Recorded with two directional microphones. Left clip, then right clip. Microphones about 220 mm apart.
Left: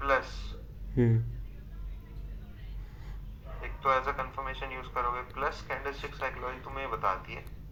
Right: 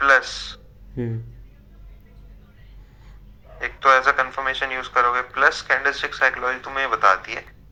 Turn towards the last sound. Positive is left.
turn(degrees=-45)  # may be behind; listen again after turning